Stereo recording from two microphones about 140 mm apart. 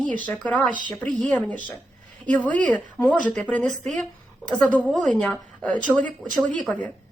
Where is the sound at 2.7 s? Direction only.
10° left (ahead or behind).